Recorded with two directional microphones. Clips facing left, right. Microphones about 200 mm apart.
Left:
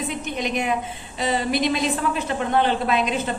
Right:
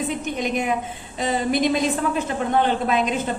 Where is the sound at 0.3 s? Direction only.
45° right (ahead or behind).